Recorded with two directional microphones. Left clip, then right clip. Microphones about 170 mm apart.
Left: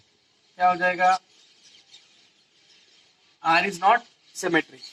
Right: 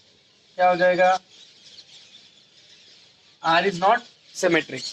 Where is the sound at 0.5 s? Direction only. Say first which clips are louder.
Right 3 dB; 20° right (ahead or behind).